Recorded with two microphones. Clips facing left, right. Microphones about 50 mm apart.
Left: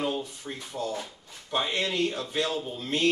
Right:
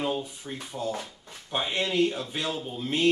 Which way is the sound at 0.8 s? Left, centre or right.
Right.